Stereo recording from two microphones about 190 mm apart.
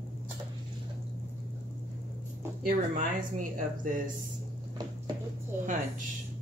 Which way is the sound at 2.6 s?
45° right (ahead or behind).